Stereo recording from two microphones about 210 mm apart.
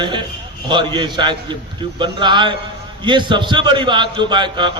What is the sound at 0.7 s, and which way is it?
A man's voice, 20° right (ahead or behind).